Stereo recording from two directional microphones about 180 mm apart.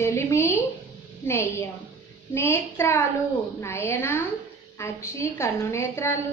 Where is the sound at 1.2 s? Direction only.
10° left (ahead or behind).